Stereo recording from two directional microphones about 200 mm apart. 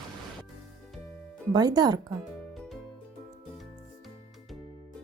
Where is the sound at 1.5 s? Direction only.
20° right (ahead or behind).